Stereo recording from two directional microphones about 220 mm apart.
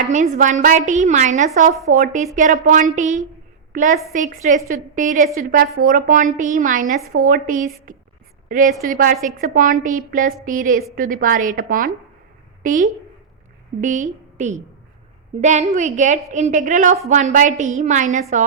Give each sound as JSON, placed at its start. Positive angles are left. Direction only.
{"t": 0.0, "sound": "a woman's voice", "side_deg": -35}